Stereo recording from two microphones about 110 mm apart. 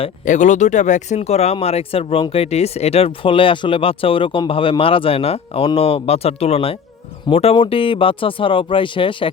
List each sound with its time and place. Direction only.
0.0 s speech: 90° left; by 7.5 s 65° left (ahead or behind)
7.5 s speech: 55° left (ahead or behind)